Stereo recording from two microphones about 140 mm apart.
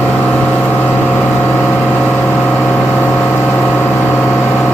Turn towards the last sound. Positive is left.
turn(degrees=15)  # may be behind; listen again after turning